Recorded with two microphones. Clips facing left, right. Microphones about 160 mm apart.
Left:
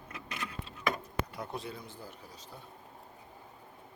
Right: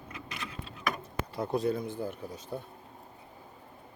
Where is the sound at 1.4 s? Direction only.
40° right (ahead or behind).